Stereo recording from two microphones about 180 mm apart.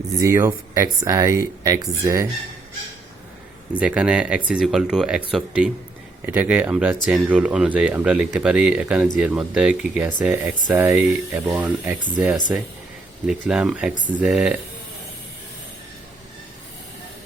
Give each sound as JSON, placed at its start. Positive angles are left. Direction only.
{"t": 0.1, "sound": "speech", "side_deg": -15}
{"t": 3.8, "sound": "speech", "side_deg": -5}